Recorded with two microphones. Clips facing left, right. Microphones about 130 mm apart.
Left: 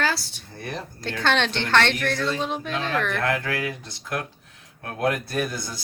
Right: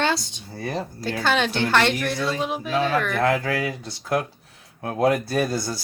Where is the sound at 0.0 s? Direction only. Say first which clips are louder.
Right 3 dB; 20° right (ahead or behind).